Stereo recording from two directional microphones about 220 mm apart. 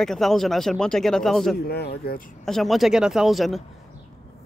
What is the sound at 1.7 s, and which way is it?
Speech, 45° left (ahead or behind).